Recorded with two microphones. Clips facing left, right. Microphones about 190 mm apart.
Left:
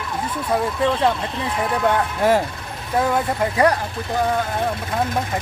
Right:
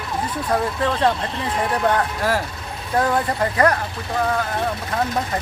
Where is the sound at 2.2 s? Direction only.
20° left (ahead or behind).